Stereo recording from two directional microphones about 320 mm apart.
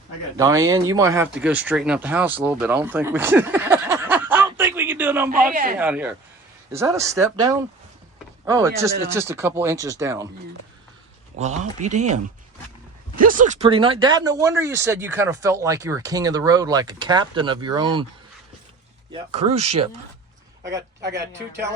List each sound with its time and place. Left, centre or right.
0.3 s speech: centre
11.3 s speech: right
19.1 s speech: centre
21.0 s speech: right